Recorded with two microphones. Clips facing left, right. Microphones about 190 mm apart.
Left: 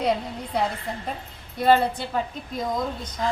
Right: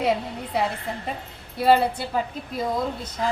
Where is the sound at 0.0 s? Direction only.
5° right (ahead or behind).